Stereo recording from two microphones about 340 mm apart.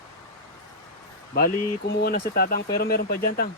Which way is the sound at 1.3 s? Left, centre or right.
Left.